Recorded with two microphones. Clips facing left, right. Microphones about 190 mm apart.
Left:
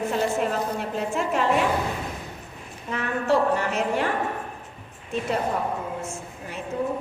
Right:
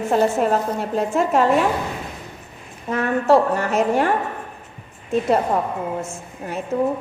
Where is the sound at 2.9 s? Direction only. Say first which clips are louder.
Right 7 dB; 45° right (ahead or behind).